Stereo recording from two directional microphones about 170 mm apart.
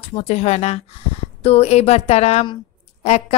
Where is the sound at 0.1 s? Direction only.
40° left (ahead or behind).